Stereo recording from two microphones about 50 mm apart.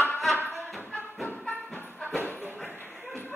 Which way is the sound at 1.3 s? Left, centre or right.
Left.